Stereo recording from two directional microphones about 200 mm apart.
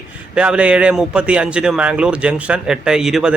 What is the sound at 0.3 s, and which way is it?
A man's voice, 5° right (ahead or behind).